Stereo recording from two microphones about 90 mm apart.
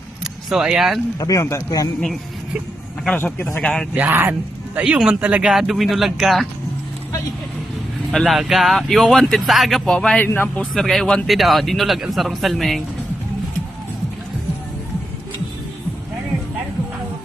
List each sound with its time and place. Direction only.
0.5 s speech: 5° right (ahead or behind)
1.2 s speech: 40° left (ahead or behind)
3.6 s speech: 10° left (ahead or behind)
3.9 s speech: 20° right (ahead or behind); by 6.5 s centre (ahead or behind)
8.1 s speech: centre (ahead or behind)
10.2 s a man's voice: 25° left (ahead or behind)
10.8 s speech: 5° left (ahead or behind)